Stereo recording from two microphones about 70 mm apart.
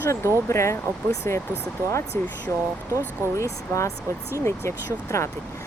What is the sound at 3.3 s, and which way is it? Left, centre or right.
Speech, left.